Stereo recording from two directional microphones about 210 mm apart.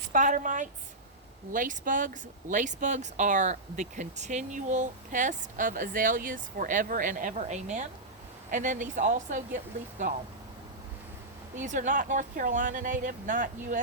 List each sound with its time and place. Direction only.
0.1 s speech: 40° right (ahead or behind)
11.6 s speech: 35° right (ahead or behind)